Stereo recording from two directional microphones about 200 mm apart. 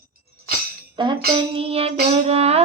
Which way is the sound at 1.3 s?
25° right (ahead or behind).